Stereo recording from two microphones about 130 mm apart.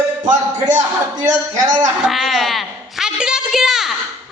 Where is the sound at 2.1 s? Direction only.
Centre (ahead or behind).